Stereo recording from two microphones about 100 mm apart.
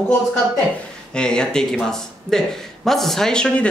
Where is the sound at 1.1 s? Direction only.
10° left (ahead or behind).